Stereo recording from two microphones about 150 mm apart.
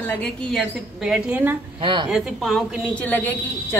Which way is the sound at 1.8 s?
35° right (ahead or behind).